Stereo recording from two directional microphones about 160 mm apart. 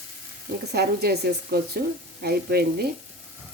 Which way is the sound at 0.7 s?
85° right.